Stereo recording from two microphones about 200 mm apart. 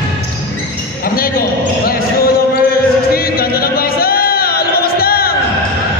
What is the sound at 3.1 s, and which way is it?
Music, 50° left (ahead or behind).